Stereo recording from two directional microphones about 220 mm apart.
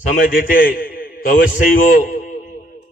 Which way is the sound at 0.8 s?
40° left (ahead or behind).